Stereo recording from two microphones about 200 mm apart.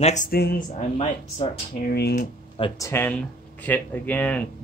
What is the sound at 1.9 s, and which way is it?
Speech, 50° left (ahead or behind).